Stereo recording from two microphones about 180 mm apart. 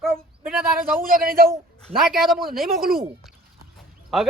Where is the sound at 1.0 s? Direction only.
55° right (ahead or behind).